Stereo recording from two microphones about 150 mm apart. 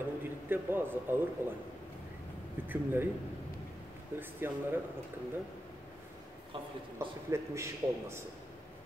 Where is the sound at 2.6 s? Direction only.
15° right (ahead or behind).